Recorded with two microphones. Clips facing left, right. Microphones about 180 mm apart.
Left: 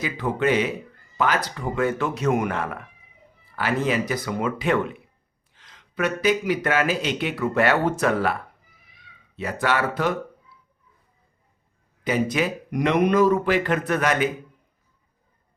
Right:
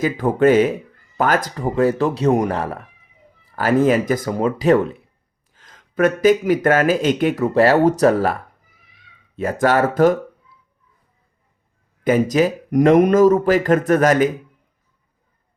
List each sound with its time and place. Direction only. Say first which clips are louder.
0.0 s speech: right 8 dB; 45° right (ahead or behind)
5.5 s speech: right 8 dB; 45° right (ahead or behind)
12.0 s speech: right 7 dB; 45° right (ahead or behind)